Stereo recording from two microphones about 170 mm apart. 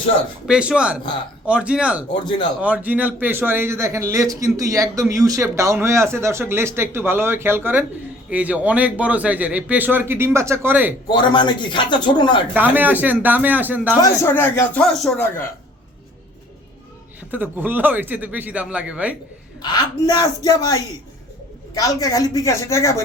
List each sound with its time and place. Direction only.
0.4 s a man's voice: 5° right (ahead or behind)
11.1 s speech: 25° left (ahead or behind)
12.5 s a man's voice: 10° right (ahead or behind)
14.0 s speech: 15° left (ahead or behind)
17.3 s a man's voice: 10° right (ahead or behind)
19.6 s speech: 25° left (ahead or behind)